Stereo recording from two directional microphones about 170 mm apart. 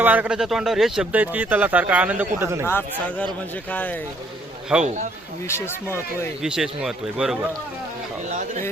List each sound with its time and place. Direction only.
0.0 s speech: 10° right (ahead or behind)
2.6 s speech: 10° left (ahead or behind)
4.7 s speech: 10° right (ahead or behind)
5.5 s speech: 15° left (ahead or behind)
6.4 s speech: 5° right (ahead or behind)
8.3 s a sound: 50° right (ahead or behind)